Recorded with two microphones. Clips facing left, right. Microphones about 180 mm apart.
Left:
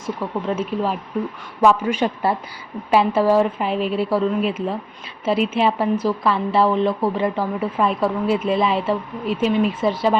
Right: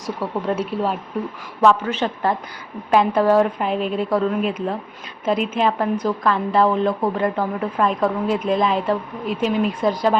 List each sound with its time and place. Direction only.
0.2 s a woman's voice: centre (ahead or behind)
1.6 s a woman's voice: 10° left (ahead or behind)